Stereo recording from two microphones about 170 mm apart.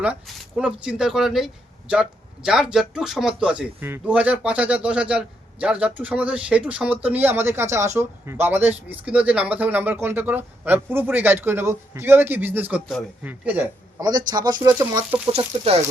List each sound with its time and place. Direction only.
0.0 s speech: 5° right (ahead or behind)
14.0 s a man's voice: 25° right (ahead or behind)
15.3 s speech: 35° right (ahead or behind)